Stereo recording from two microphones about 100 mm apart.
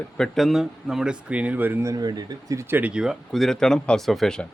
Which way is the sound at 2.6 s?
20° right (ahead or behind).